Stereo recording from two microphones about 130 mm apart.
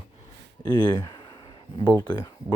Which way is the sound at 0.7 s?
35° left (ahead or behind).